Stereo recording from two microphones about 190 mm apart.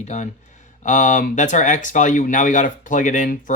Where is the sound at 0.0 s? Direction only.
35° left (ahead or behind).